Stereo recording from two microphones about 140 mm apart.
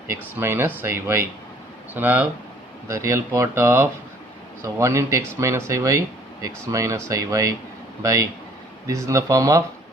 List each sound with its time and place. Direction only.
0.1 s speech: 15° right (ahead or behind)